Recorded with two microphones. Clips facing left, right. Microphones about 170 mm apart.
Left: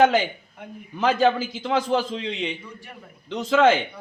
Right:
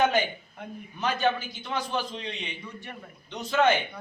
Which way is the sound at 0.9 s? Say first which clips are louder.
Left 7 dB; 90° left.